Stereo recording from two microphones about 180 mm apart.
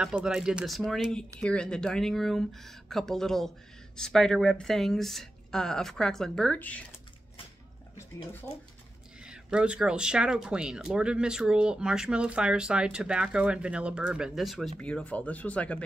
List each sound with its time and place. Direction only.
0.0 s speech: 5° right (ahead or behind)
9.2 s speech: 5° right (ahead or behind)